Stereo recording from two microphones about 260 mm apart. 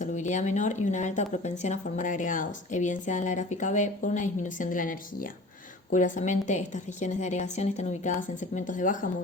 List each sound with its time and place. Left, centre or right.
0.0 s speech: left